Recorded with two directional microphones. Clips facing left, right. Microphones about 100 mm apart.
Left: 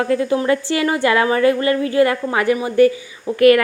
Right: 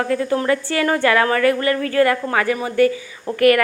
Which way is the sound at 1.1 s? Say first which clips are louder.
Left 3 dB; 20° left (ahead or behind).